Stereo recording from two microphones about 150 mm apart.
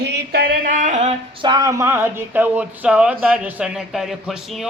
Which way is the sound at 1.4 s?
25° right (ahead or behind).